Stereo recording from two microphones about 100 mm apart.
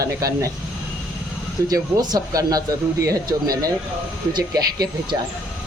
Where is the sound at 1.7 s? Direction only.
40° right (ahead or behind).